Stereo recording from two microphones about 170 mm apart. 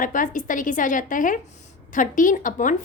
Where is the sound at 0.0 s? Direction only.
50° left (ahead or behind).